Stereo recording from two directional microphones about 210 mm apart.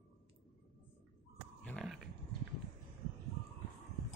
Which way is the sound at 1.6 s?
5° left (ahead or behind).